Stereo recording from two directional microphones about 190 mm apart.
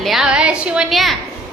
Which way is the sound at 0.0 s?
Centre (ahead or behind).